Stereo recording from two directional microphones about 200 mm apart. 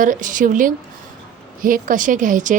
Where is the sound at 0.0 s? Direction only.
40° right (ahead or behind).